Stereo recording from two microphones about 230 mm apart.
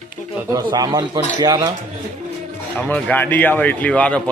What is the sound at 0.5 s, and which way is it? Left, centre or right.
Speech, centre.